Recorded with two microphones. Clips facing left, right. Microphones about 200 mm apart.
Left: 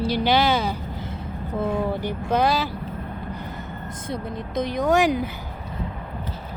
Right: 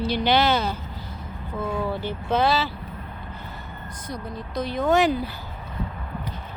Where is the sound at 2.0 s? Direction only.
15° left (ahead or behind).